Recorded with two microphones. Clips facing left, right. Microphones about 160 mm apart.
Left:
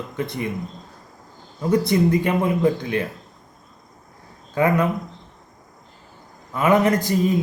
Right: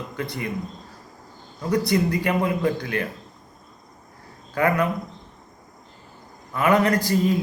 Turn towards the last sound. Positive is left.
turn(degrees=20)  # may be behind; listen again after turning